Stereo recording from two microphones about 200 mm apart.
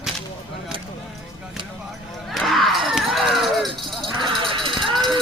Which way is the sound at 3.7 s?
25° right (ahead or behind).